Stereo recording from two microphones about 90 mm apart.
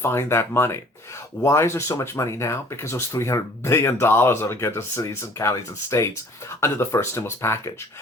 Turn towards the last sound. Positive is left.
turn(degrees=30)  # may be behind; listen again after turning